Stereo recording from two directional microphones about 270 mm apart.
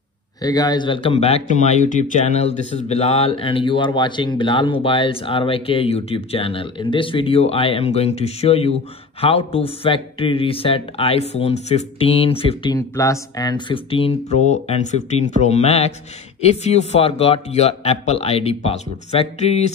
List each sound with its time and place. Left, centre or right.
0.4 s speech: centre